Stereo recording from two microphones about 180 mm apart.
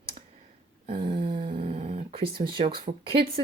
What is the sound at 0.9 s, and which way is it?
Dog, 30° right (ahead or behind).